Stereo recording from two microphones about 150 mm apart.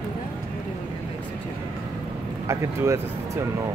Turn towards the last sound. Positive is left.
turn(degrees=-20)  # may be behind; listen again after turning